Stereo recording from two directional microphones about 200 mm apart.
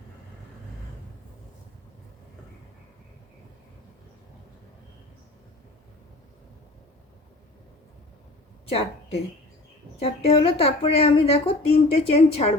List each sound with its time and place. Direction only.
8.7 s a woman's voice: 30° left (ahead or behind)